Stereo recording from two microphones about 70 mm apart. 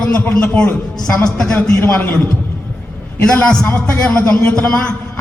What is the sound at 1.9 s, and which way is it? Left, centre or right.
Speech, left.